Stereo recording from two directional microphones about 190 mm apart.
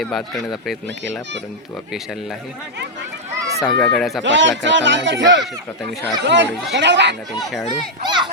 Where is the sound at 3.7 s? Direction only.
5° left (ahead or behind).